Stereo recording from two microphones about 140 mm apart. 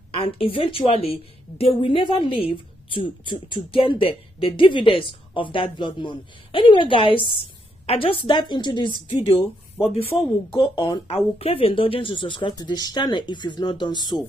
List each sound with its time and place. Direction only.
0.1 s a woman's voice: 40° left (ahead or behind)